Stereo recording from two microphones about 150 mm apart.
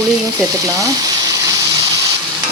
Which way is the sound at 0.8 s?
25° right (ahead or behind).